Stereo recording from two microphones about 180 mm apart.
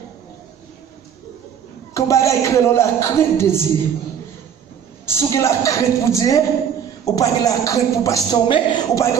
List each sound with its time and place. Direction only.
2.0 s a man's voice: 15° left (ahead or behind)
5.0 s a man's voice: 15° left (ahead or behind)